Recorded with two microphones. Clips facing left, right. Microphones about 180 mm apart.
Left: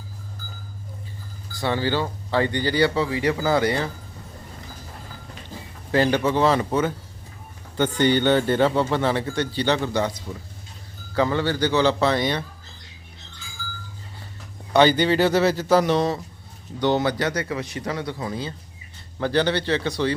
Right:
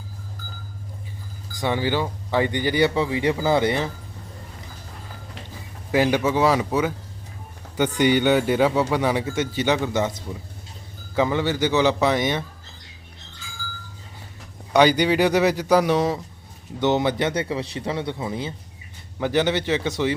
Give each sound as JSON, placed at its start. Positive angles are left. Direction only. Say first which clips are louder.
{"t": 1.5, "sound": "speech", "louder": "even", "side_deg": -15}
{"t": 5.9, "sound": "a man's voice", "louder": "even", "side_deg": -10}
{"t": 7.9, "sound": "a man's voice", "louder": "right 1 dB", "side_deg": -15}
{"t": 14.7, "sound": "a man's voice", "louder": "even", "side_deg": -10}
{"t": 16.8, "sound": "a man's voice", "louder": "right 1 dB", "side_deg": -20}